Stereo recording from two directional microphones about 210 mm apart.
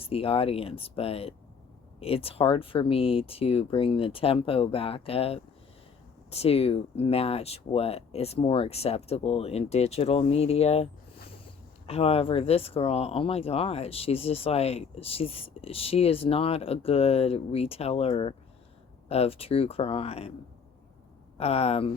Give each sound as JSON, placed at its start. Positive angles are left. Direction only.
{"t": 0.0, "sound": "speech", "side_deg": 25}
{"t": 11.9, "sound": "speech", "side_deg": 30}
{"t": 21.3, "sound": "speech", "side_deg": 30}